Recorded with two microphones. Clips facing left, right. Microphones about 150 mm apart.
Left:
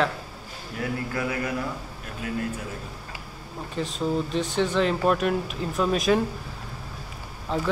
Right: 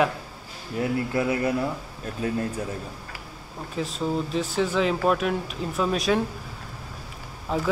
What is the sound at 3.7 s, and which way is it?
Speech, centre (ahead or behind).